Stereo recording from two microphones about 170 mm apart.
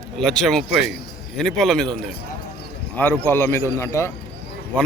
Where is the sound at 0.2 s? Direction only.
5° left (ahead or behind).